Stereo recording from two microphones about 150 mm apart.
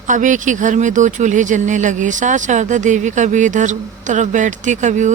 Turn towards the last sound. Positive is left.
turn(degrees=-55)  # may be behind; listen again after turning